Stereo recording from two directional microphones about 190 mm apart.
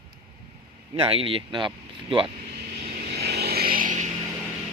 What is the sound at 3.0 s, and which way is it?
Vehicle, 55° right (ahead or behind).